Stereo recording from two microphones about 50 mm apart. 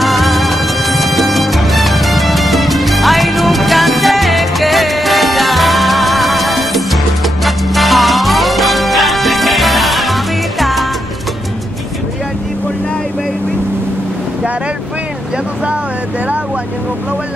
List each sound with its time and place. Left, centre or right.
0.0 s music: centre